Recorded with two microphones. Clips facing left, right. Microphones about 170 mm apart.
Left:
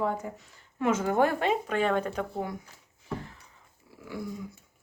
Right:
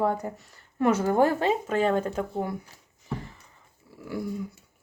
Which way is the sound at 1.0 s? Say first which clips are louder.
Right 1 dB; 35° right (ahead or behind).